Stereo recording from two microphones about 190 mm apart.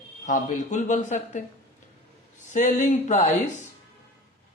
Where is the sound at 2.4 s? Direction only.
40° left (ahead or behind).